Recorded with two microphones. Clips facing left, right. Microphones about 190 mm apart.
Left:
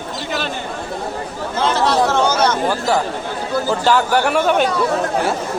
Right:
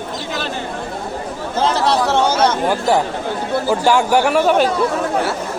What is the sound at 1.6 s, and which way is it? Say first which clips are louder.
Speech: even; 35° right (ahead or behind).